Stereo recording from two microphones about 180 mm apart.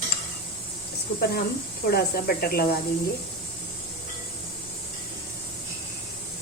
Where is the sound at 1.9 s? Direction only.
60° left (ahead or behind).